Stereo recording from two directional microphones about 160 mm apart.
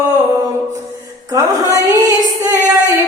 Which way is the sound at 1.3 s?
20° right (ahead or behind).